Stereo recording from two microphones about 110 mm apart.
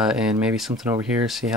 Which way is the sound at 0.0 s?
5° right (ahead or behind).